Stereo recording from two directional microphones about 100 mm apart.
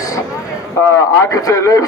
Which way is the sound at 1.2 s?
30° left (ahead or behind).